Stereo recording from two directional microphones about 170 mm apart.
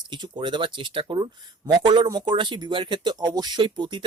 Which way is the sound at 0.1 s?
25° right (ahead or behind).